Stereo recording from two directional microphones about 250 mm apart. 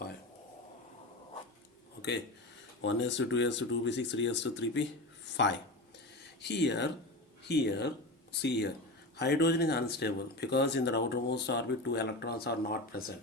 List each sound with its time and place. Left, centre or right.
2.8 s speech: left
6.4 s speech: left